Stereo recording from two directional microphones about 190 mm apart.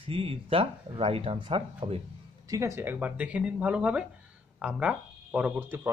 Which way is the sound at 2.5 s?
15° right (ahead or behind).